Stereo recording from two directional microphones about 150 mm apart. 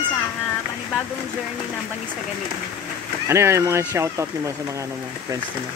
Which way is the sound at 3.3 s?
20° right (ahead or behind).